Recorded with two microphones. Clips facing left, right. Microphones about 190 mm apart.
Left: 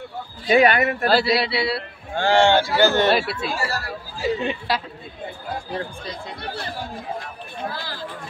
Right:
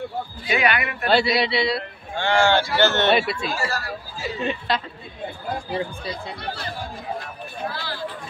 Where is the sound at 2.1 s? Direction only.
35° left (ahead or behind).